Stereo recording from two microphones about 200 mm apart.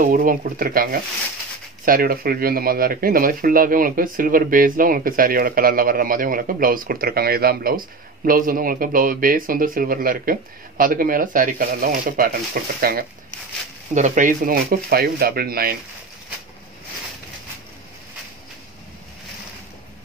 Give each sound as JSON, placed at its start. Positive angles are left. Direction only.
{"t": 0.0, "sound": "speech", "side_deg": -45}
{"t": 1.9, "sound": "speech", "side_deg": -45}